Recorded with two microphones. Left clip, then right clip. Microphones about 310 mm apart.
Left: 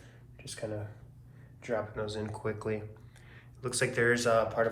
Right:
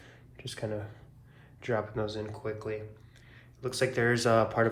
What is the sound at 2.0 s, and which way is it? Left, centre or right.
Speech, centre.